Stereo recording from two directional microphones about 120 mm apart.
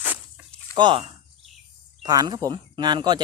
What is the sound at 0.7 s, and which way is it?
Speech, 40° right (ahead or behind).